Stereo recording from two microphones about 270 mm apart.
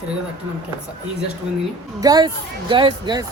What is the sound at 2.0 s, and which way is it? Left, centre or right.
Speech, centre.